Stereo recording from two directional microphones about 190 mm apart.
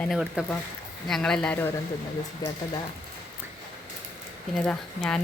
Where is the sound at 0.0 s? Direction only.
Centre (ahead or behind).